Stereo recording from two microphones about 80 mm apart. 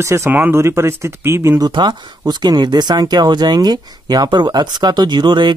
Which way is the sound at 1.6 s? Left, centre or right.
Right.